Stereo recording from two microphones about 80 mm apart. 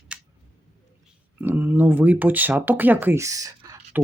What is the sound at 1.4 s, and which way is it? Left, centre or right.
Speech, right.